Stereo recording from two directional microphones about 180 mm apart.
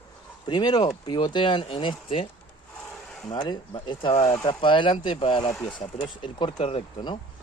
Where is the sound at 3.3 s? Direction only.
25° left (ahead or behind).